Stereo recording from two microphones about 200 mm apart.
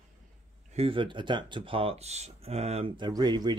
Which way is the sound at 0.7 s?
30° right (ahead or behind).